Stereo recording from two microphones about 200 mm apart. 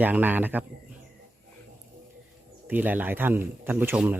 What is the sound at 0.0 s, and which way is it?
Speech, 10° right (ahead or behind).